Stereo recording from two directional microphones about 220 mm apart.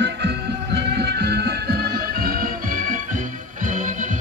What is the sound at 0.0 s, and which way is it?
Music, 50° right (ahead or behind).